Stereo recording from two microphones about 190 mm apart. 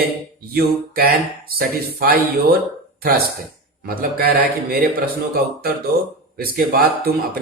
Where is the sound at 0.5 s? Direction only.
55° right (ahead or behind).